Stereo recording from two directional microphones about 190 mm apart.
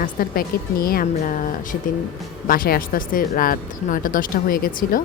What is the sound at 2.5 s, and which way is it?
Speech, 50° left (ahead or behind).